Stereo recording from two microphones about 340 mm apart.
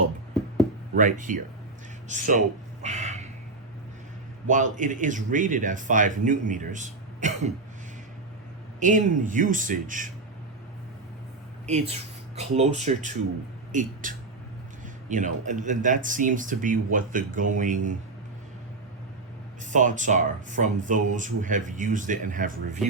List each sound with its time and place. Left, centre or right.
0.9 s speech: right
2.8 s crow: centre
4.4 s speech: right
8.8 s speech: right
11.6 s speech: centre
15.1 s speech: right
19.7 s speech: right